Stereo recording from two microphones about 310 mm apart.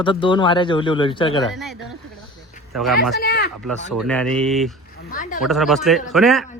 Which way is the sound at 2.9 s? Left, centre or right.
Left.